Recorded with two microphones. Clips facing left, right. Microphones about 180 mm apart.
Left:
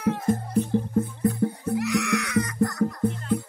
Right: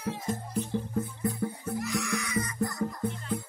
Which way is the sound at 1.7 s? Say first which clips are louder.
Left 7 dB; 70° left (ahead or behind).